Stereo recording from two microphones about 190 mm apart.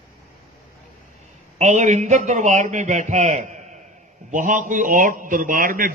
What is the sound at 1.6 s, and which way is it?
A man's voice, 35° right (ahead or behind).